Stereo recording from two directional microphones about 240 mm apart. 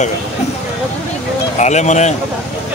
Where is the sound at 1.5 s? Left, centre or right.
Left.